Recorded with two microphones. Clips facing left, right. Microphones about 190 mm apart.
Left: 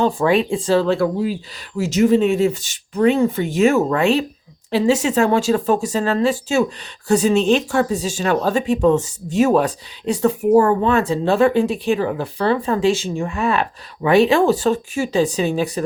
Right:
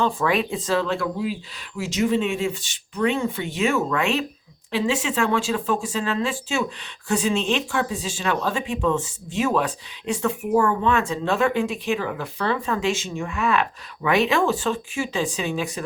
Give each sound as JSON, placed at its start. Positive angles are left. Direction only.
{"t": 0.0, "sound": "speech", "side_deg": 30}